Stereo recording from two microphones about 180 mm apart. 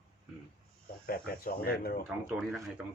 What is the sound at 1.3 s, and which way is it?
Speech, 55° left (ahead or behind).